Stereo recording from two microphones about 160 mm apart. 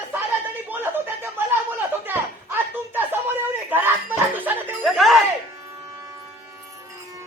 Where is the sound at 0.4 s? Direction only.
10° right (ahead or behind).